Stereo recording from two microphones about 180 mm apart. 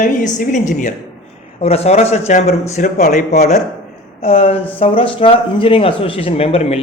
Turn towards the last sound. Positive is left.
turn(degrees=35)  # may be behind; listen again after turning